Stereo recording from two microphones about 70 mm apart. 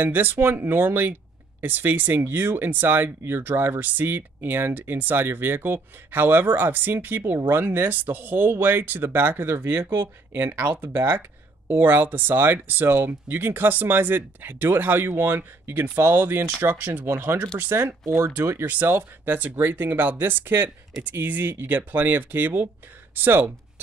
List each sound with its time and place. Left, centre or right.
0.0 s speech: right